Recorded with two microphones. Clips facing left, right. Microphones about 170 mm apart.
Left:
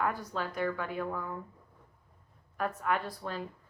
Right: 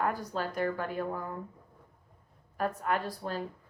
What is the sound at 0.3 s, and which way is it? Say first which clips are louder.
Speech: right 1 dB; 40° right (ahead or behind).